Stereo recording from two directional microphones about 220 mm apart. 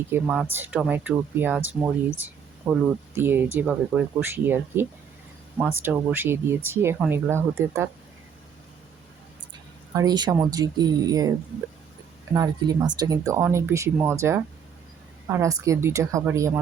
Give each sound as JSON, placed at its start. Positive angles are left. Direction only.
{"t": 0.1, "sound": "speech", "side_deg": -5}
{"t": 2.6, "sound": "speech", "side_deg": -5}
{"t": 9.9, "sound": "speech", "side_deg": -15}